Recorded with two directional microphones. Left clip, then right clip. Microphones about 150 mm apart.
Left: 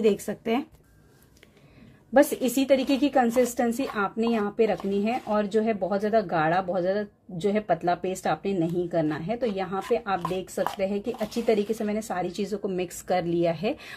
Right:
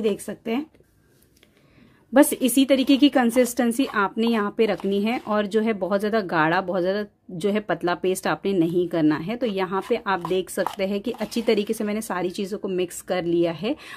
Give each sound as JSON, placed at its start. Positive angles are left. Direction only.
{"t": 0.0, "sound": "speech", "side_deg": -15}
{"t": 2.1, "sound": "a woman's voice", "side_deg": -30}